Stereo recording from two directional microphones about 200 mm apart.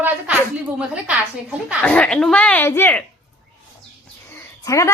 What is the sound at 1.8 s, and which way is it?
Speech, 5° left (ahead or behind).